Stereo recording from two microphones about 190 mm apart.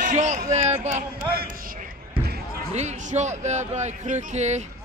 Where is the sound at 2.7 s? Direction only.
35° right (ahead or behind).